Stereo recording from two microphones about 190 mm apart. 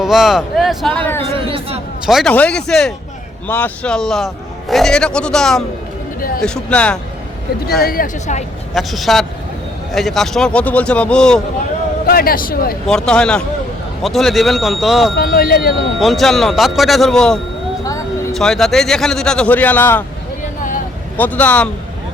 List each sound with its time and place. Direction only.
0.0 s speech: centre (ahead or behind)
1.3 s speech: 30° right (ahead or behind)
2.0 s speech: centre (ahead or behind)
6.1 s speech: 50° left (ahead or behind)
6.4 s speech: 5° left (ahead or behind)
7.8 s speech: 50° left (ahead or behind)
8.7 s speech: centre (ahead or behind)
12.0 s speech: 50° left (ahead or behind)
12.9 s speech: 5° left (ahead or behind)
15.1 s speech: 50° left (ahead or behind)
16.0 s speech: centre (ahead or behind)
17.8 s a sound: 15° left (ahead or behind)
18.3 s speech: centre (ahead or behind)
21.2 s a man's voice: 10° left (ahead or behind)